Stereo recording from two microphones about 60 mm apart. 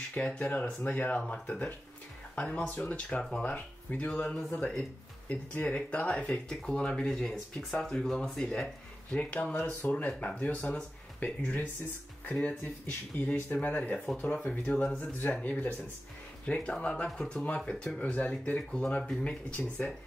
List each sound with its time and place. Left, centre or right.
0.1 s speech: left
5.3 s speech: left
6.5 s speech: centre; by 15.7 s left
16.4 s speech: centre